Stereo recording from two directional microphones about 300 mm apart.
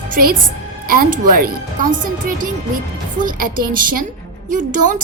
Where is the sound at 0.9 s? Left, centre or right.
Right.